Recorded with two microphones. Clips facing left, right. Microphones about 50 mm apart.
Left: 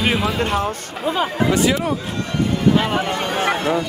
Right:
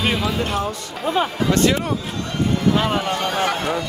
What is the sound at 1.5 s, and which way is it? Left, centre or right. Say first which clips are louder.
Speech: right 2 dB; centre.